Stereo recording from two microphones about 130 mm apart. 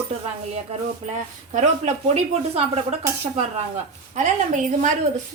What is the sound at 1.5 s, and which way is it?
Speech, 60° right (ahead or behind).